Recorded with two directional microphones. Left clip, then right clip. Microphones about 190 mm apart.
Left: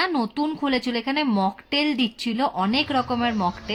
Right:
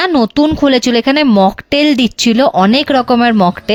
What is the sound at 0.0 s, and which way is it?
Speech, 55° right (ahead or behind).